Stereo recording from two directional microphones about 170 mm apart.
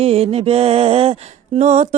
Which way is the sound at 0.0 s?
35° right (ahead or behind).